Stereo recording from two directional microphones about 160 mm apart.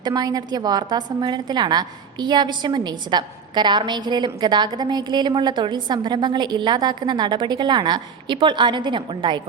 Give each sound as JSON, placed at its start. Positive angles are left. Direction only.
{"t": 0.0, "sound": "a woman's voice", "side_deg": -25}